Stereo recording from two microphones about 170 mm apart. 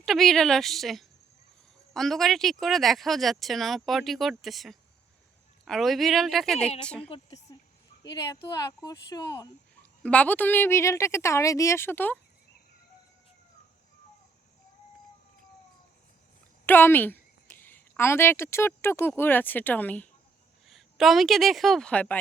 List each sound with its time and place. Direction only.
0.0 s a woman's voice: centre (ahead or behind)
7.5 s a sound: 25° left (ahead or behind)
8.1 s speech: 20° left (ahead or behind)
10.0 s a woman's voice: 5° left (ahead or behind)
16.6 s a woman's voice: 10° left (ahead or behind)